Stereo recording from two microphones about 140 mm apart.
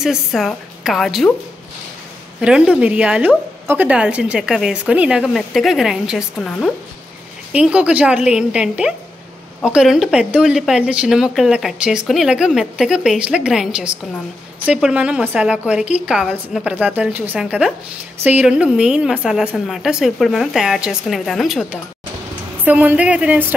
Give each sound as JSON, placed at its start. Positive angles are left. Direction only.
{"t": 0.0, "sound": "speech", "side_deg": 0}
{"t": 2.4, "sound": "a woman's voice", "side_deg": -5}
{"t": 22.7, "sound": "a woman's voice", "side_deg": -10}